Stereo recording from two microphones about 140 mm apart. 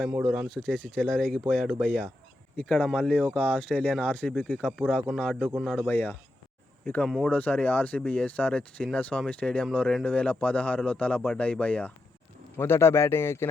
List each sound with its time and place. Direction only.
0.2 s speech: centre (ahead or behind)
3.0 s speech: 10° left (ahead or behind)
4.8 s speech: 5° right (ahead or behind)
5.9 s speech: 15° left (ahead or behind)